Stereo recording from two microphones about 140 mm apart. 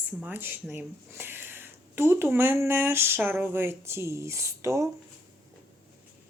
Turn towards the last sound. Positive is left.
turn(degrees=-20)  # may be behind; listen again after turning